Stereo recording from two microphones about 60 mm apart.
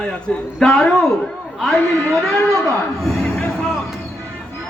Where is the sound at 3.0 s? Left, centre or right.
Centre.